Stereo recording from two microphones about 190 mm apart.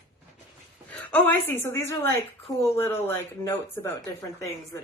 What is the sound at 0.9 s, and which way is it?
Speech, 10° left (ahead or behind).